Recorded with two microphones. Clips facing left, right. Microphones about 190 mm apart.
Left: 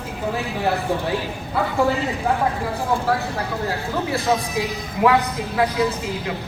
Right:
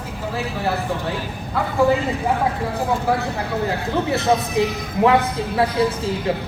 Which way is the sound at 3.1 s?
15° right (ahead or behind).